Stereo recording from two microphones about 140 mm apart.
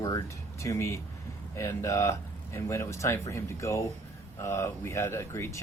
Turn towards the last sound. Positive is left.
turn(degrees=20)  # may be behind; listen again after turning